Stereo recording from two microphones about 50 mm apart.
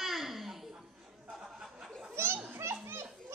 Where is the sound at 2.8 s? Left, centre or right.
Right.